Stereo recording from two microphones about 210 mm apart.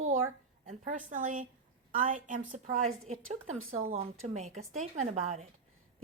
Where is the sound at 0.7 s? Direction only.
35° right (ahead or behind).